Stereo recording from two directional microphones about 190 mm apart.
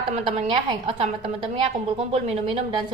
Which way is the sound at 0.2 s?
30° right (ahead or behind).